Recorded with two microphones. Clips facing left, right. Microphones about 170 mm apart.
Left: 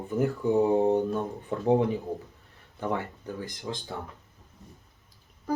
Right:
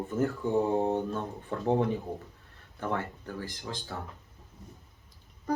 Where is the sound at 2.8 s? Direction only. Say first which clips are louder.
Left 2 dB; 15° left (ahead or behind).